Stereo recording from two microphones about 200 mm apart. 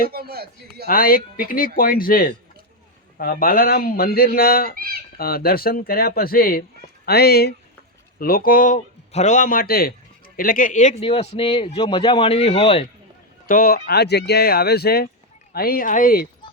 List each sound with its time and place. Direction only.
0.1 s a man's voice: 50° right (ahead or behind)
0.9 s speech: 45° left (ahead or behind)
4.8 s fowl: 45° right (ahead or behind)
5.1 s a man's voice: 50° left (ahead or behind); by 12.9 s 30° left (ahead or behind)
13.5 s speech: 45° left (ahead or behind)